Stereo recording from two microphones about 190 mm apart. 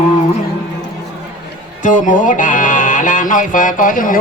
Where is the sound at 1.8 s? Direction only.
45° left (ahead or behind).